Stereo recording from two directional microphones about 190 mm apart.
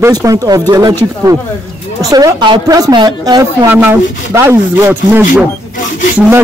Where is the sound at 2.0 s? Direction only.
20° right (ahead or behind).